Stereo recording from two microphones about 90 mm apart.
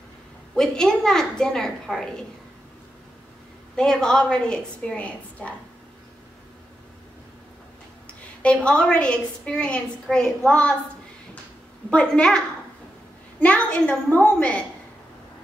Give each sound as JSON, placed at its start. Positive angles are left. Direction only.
{"t": 0.6, "sound": "a woman's voice", "side_deg": 5}
{"t": 3.7, "sound": "a woman's voice", "side_deg": 10}
{"t": 8.4, "sound": "a woman's voice", "side_deg": 10}
{"t": 11.9, "sound": "a woman's voice", "side_deg": 10}